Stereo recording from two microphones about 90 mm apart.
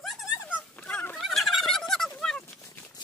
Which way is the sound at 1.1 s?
Centre (ahead or behind).